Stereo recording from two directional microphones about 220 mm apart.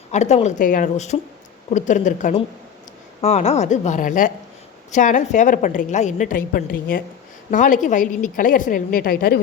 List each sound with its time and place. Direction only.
0.1 s a woman's voice: 30° left (ahead or behind)